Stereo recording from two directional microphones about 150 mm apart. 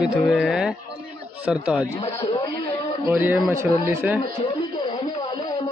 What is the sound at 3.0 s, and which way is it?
Speech, 10° right (ahead or behind).